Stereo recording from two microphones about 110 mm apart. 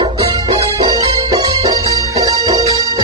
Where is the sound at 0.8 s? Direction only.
35° right (ahead or behind).